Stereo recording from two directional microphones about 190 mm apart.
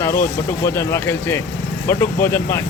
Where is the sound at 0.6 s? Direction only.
15° left (ahead or behind).